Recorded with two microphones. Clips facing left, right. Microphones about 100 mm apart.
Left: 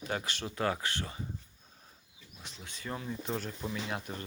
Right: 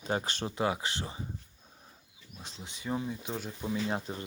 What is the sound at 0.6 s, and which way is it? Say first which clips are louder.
Speech: right 1 dB; 15° right (ahead or behind).